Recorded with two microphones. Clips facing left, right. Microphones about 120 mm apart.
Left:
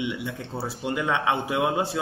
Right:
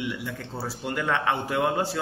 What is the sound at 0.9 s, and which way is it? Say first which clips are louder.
A man's voice: left 1 dB; 5° left (ahead or behind).